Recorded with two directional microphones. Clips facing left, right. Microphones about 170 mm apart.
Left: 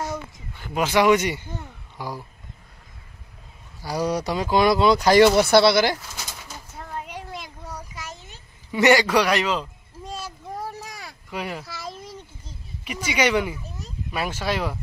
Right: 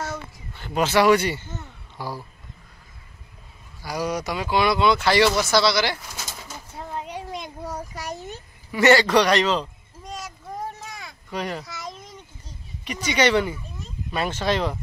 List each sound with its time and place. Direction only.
0.0 s speech: 10° left (ahead or behind)
3.8 s speech: 35° left (ahead or behind)
5.4 s speech: 60° left (ahead or behind)
6.8 s children playing: 20° right (ahead or behind)
7.6 s a sound: 40° right (ahead or behind)
8.7 s a man's voice: 15° left (ahead or behind)
10.0 s a sound: 30° left (ahead or behind)
11.2 s a child's voice: 10° left (ahead or behind)
11.6 s a sound: 30° left (ahead or behind)
12.8 s a man's voice: 10° left (ahead or behind)